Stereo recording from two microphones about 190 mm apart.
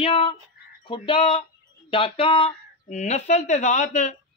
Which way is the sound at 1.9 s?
30° left (ahead or behind).